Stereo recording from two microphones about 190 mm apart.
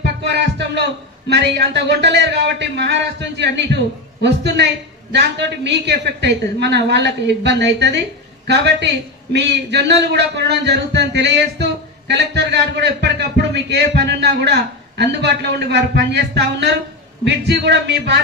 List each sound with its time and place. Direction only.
0.0 s music: 60° right (ahead or behind)
1.3 s a man's voice: 65° right (ahead or behind)